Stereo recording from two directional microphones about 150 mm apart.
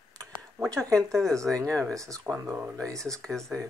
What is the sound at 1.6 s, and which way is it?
Speech, 5° left (ahead or behind).